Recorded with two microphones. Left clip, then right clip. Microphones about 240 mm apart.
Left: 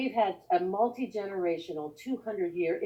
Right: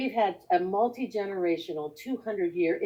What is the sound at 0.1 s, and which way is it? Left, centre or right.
Speech, right.